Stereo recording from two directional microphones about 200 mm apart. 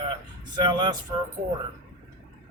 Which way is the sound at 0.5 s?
20° right (ahead or behind).